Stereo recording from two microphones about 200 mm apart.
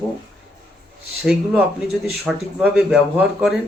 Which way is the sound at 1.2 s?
5° right (ahead or behind).